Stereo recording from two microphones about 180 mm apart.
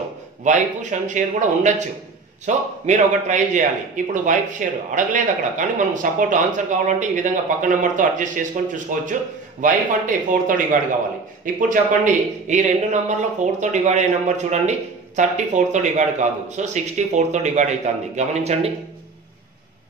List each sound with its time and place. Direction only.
0.4 s a man's voice: 45° right (ahead or behind)